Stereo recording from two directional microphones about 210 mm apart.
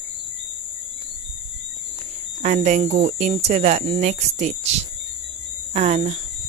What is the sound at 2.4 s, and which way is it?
Speech, 35° right (ahead or behind).